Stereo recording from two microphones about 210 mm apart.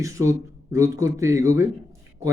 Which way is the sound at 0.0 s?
15° right (ahead or behind).